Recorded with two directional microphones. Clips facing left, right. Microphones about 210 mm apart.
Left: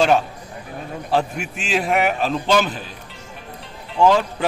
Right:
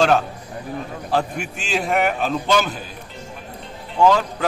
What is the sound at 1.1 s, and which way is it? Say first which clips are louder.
A man's voice: left 1 dB; 5° left (ahead or behind).